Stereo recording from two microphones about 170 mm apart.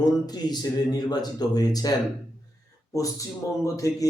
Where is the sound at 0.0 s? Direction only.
25° left (ahead or behind).